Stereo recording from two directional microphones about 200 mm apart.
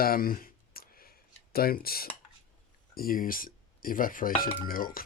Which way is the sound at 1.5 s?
50° left (ahead or behind).